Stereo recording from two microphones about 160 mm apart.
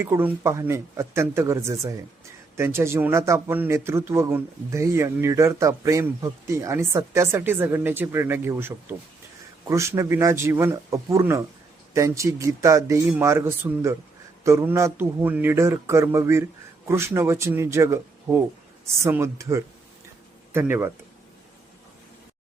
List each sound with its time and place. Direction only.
0.0 s speech: 15° right (ahead or behind)